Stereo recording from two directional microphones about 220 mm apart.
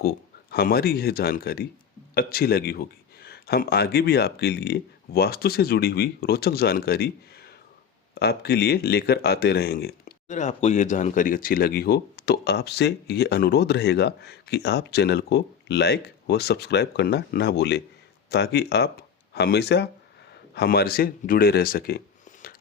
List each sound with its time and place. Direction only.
0.0 s speech: 45° left (ahead or behind)
8.1 s speech: 45° left (ahead or behind)